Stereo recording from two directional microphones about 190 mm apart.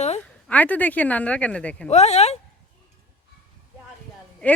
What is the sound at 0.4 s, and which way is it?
A woman's voice, 10° left (ahead or behind).